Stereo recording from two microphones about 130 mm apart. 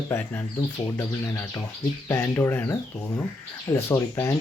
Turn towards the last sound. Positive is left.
turn(degrees=20)  # may be behind; listen again after turning